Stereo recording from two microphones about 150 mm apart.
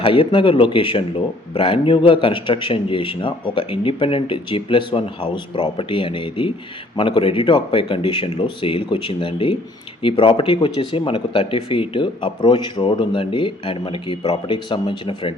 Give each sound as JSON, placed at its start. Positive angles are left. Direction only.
{"t": 0.0, "sound": "speech", "side_deg": 35}